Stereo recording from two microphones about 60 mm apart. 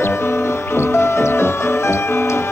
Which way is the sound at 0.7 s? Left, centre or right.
Left.